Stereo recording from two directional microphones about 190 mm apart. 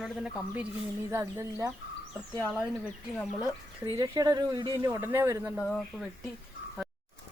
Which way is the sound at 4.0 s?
20° right (ahead or behind).